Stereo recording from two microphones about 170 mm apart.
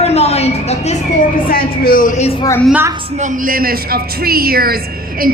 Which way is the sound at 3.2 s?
55° right (ahead or behind).